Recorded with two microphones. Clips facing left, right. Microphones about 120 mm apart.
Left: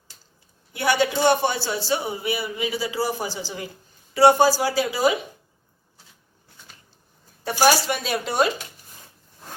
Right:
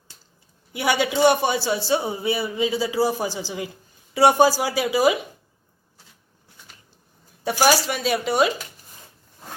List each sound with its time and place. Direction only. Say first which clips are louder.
0.7 s a man's voice: left 1 dB; 15° right (ahead or behind)
7.6 s speech: even; centre (ahead or behind)